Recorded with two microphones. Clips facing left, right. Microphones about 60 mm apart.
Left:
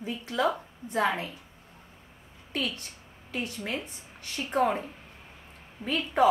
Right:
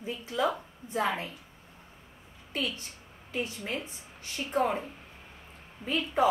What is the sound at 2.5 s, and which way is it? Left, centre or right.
Speech, left.